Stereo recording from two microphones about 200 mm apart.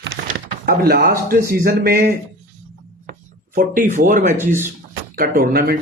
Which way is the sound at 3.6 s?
45° right (ahead or behind).